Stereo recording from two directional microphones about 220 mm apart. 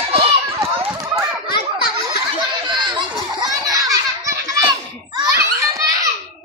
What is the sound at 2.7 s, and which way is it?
Chatter, 20° right (ahead or behind).